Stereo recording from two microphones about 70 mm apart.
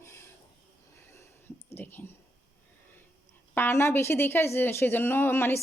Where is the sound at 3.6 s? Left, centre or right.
Left.